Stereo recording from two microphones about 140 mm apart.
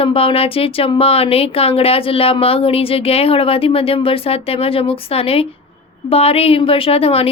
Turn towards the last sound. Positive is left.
turn(degrees=45)  # may be behind; listen again after turning